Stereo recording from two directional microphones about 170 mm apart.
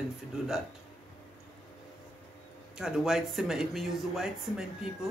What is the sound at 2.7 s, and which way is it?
Speech, 5° right (ahead or behind).